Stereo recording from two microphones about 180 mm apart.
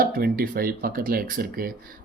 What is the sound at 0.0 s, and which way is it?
Speech, 55° right (ahead or behind).